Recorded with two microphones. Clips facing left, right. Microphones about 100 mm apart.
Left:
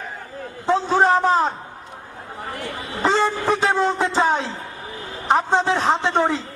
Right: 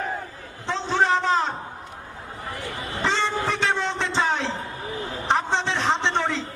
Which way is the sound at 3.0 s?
40° left (ahead or behind).